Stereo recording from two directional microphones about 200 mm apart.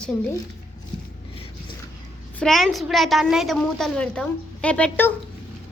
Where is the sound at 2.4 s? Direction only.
Centre (ahead or behind).